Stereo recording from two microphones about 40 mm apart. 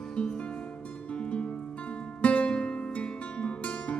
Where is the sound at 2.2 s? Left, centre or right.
Left.